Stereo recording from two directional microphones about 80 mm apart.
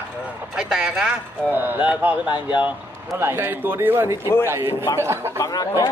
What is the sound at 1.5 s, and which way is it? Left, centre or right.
Speech, right.